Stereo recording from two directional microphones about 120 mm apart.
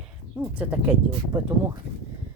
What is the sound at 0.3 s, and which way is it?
Speech, 15° right (ahead or behind).